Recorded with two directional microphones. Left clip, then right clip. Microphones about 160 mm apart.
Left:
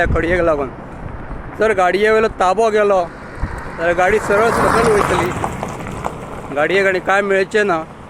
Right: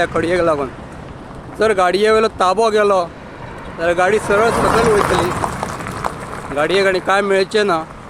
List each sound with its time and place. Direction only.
0.0 s speech: 20° right (ahead or behind)
4.4 s speech: 10° right (ahead or behind)
4.9 s speech: 60° right (ahead or behind)
5.3 s a sound: 40° right (ahead or behind)
5.9 s run: 55° right (ahead or behind)
6.6 s speech: 25° right (ahead or behind)